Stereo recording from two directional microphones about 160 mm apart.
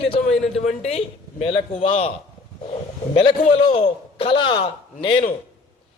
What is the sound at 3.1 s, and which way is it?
A man's voice, 35° left (ahead or behind).